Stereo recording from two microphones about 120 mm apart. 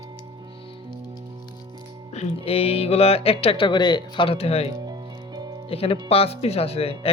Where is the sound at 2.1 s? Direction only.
65° left (ahead or behind).